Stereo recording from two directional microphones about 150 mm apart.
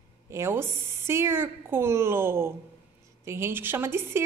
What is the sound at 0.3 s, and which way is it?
A woman's voice, 15° right (ahead or behind).